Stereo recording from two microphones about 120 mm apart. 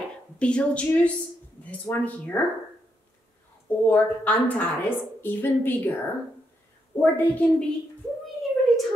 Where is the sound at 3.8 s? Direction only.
15° left (ahead or behind).